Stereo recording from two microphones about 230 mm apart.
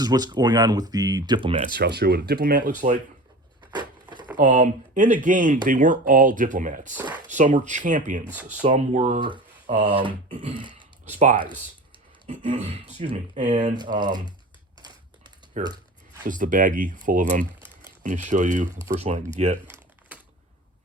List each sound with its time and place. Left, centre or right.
0.0 s speech: centre
1.6 s speech: right
3.8 s a sound: centre
4.4 s speech: right
6.9 s a sound: centre
7.3 s speech: right
8.3 s speech: centre
8.7 s speech: right
13.7 s speech: centre
14.8 s typing: centre
15.6 s speech: right
19.7 s crumpling: centre